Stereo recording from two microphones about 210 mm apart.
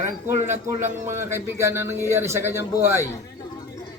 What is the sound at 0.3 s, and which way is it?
Speech, 35° right (ahead or behind).